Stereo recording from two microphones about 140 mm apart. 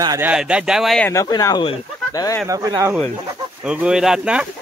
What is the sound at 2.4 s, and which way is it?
Speech, 25° right (ahead or behind).